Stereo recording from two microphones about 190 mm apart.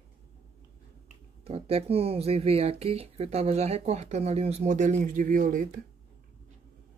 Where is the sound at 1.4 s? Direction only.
30° right (ahead or behind).